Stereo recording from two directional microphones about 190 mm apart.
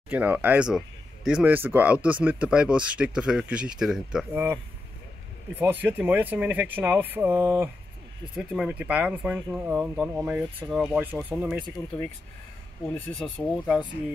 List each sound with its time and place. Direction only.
0.1 s speech: 10° right (ahead or behind)
5.6 s speech: 10° right (ahead or behind); by 13.7 s 5° left (ahead or behind)